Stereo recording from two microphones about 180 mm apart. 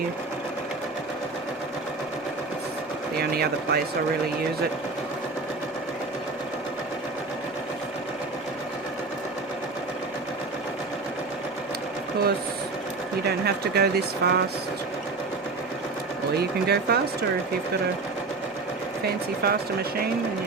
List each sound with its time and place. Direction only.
3.2 s speech: 60° right (ahead or behind)
13.2 s speech: 60° right (ahead or behind)
16.4 s speech: 60° right (ahead or behind)
19.4 s speech: 60° right (ahead or behind)